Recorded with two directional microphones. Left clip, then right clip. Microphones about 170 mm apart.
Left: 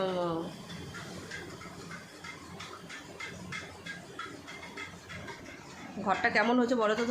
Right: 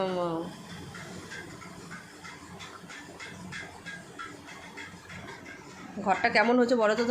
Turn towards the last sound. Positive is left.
turn(degrees=-15)  # may be behind; listen again after turning